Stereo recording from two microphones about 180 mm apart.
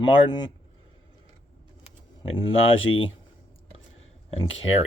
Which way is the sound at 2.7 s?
90° left.